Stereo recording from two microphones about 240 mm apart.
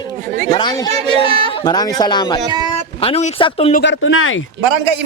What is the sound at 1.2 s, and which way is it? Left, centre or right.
Speech, right.